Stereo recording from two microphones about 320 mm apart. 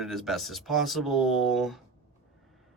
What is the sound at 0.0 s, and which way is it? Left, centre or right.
Speech, centre.